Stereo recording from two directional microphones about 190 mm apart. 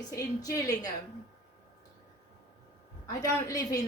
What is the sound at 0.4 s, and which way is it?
Speech, 20° left (ahead or behind).